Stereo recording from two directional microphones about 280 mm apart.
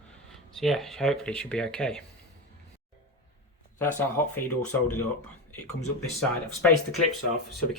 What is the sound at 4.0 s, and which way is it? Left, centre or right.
Speech, centre.